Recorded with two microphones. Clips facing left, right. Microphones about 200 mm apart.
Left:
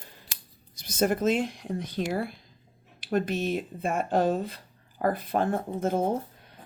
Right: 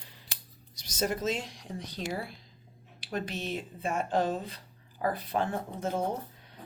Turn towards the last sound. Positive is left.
turn(degrees=50)  # may be behind; listen again after turning